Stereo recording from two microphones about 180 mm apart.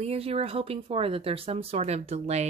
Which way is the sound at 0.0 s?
35° right (ahead or behind).